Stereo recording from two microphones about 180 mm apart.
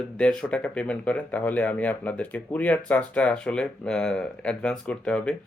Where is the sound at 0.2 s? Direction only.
5° left (ahead or behind).